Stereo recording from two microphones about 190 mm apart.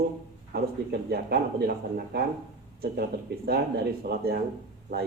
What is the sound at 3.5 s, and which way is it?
Speech, 55° right (ahead or behind).